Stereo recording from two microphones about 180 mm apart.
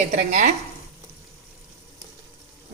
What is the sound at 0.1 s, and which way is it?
Speech, 45° right (ahead or behind).